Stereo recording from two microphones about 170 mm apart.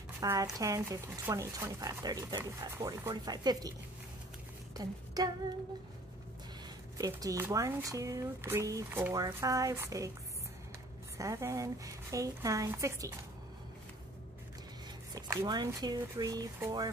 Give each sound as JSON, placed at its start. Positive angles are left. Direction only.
{"t": 0.2, "sound": "speech", "side_deg": -20}
{"t": 4.7, "sound": "a sound", "side_deg": -20}
{"t": 7.0, "sound": "speech", "side_deg": -20}
{"t": 11.1, "sound": "speech", "side_deg": -20}
{"t": 15.1, "sound": "speech", "side_deg": -25}